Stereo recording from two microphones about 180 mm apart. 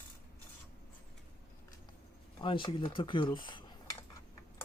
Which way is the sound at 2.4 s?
30° left (ahead or behind).